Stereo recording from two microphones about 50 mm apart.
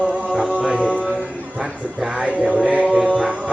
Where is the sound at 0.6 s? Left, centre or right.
Right.